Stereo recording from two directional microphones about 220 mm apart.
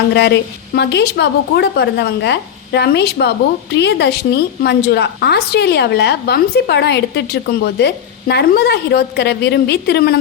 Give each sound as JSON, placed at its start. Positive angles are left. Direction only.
{"t": 0.1, "sound": "a woman's voice", "side_deg": 50}